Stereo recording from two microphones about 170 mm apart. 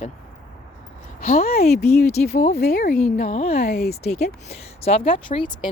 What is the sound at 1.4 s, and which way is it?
Speech, 60° left (ahead or behind).